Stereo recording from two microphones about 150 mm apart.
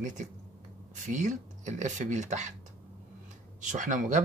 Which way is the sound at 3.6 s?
55° right (ahead or behind).